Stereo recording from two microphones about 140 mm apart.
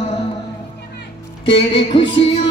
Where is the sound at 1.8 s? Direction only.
40° left (ahead or behind).